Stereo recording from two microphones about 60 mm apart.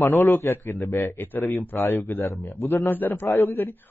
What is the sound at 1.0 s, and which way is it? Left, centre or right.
Speech, left.